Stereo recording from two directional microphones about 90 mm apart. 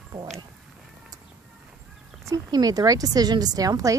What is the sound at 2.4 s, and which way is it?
Speech, 45° right (ahead or behind).